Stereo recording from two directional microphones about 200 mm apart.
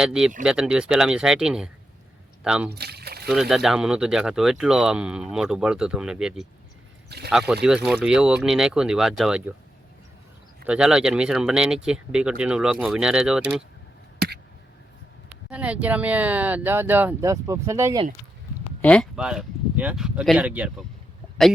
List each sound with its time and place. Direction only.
0.0 s speech: 5° right (ahead or behind)
2.7 s a sound: 55° right (ahead or behind)
3.2 s speech: centre (ahead or behind)
10.7 s speech: 5° right (ahead or behind)
15.4 s speech: 5° right (ahead or behind)
18.8 s speech: 5° left (ahead or behind)